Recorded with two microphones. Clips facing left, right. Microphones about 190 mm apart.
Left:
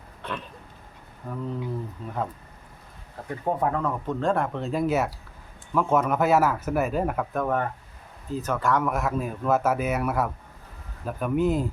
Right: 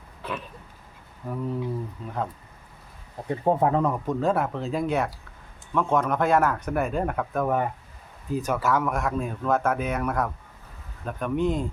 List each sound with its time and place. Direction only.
0.2 s a sound: 5° right (ahead or behind)
1.2 s speech: 10° right (ahead or behind)
3.2 s speech: 25° right (ahead or behind)
4.0 s speech: 10° right (ahead or behind)
7.4 s speech: 10° right (ahead or behind)